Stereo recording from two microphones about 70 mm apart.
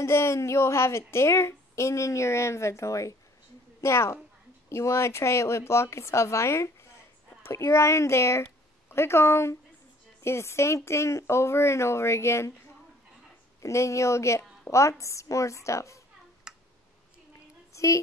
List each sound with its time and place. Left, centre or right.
0.0 s a woman's voice: left
13.6 s a woman's voice: left
16.5 s tick: centre
17.7 s a woman's voice: left